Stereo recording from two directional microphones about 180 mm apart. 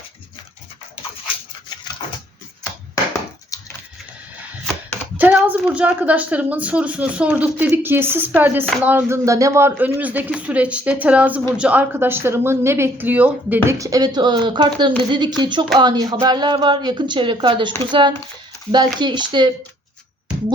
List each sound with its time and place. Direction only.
2.9 s chopping: 15° left (ahead or behind)
5.1 s speech: 10° right (ahead or behind); by 19.5 s 25° right (ahead or behind)